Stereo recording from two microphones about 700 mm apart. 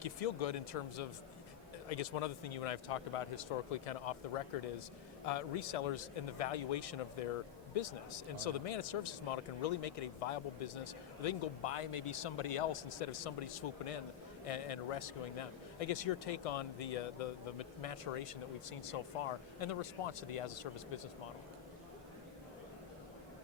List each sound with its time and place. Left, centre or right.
0.0 s a man's voice: left